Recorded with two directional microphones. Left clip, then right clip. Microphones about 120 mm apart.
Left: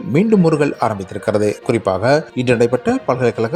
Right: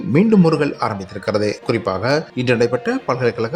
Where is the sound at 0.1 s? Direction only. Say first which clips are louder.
Left 1 dB; 35° left (ahead or behind).